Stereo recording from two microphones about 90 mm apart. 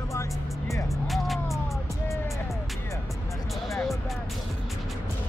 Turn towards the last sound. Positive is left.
turn(degrees=0)  # may be behind; listen again after turning